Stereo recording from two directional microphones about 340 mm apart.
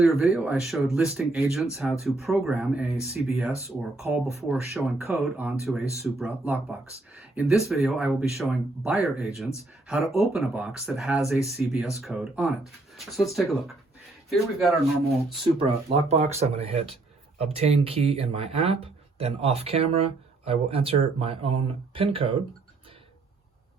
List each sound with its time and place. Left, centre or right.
0.2 s speech: centre
15.5 s speech: centre